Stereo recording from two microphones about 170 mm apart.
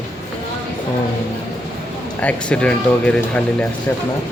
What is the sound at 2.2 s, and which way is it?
Speech, 5° left (ahead or behind).